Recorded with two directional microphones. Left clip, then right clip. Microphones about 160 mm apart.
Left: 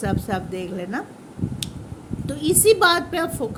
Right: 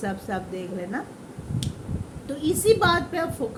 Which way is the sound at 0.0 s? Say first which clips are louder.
Left 4 dB; 55° left (ahead or behind).